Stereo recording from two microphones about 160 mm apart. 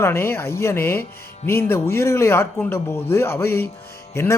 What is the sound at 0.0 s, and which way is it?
Speech, 15° left (ahead or behind).